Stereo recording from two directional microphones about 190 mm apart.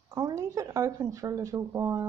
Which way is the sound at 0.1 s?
15° right (ahead or behind).